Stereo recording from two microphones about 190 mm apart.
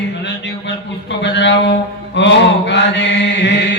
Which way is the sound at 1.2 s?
70° left (ahead or behind).